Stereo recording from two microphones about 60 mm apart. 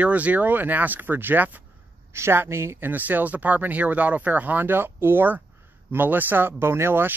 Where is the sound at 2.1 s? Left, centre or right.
Right.